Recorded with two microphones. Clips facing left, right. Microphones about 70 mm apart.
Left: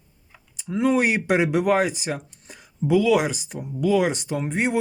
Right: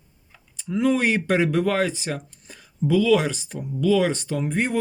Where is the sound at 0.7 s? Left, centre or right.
Left.